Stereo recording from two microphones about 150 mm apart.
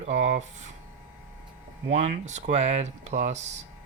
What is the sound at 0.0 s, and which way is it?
Speech, 45° right (ahead or behind).